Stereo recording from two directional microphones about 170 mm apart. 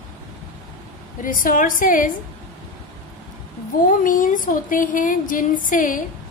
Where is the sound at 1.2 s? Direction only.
55° left (ahead or behind).